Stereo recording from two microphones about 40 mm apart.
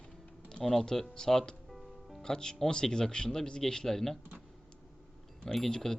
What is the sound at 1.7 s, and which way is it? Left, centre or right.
Music, centre.